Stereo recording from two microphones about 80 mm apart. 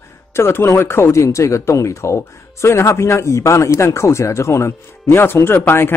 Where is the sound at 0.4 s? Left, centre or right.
Left.